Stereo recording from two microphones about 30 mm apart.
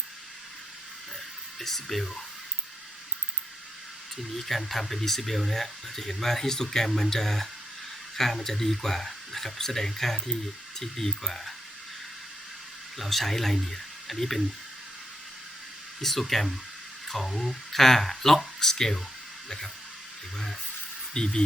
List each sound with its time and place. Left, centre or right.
1.5 s speech: centre
4.4 s speech: centre
13.0 s speech: centre
16.0 s speech: centre
21.1 s speech: left